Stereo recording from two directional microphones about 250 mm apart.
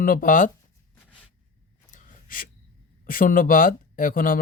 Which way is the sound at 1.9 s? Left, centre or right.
Left.